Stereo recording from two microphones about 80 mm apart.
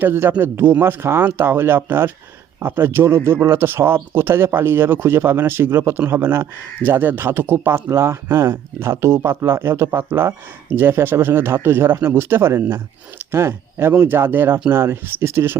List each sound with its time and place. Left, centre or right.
0.0 s speech: right